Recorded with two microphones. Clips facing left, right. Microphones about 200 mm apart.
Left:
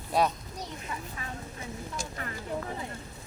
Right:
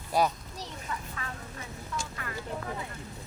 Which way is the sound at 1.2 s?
20° left (ahead or behind).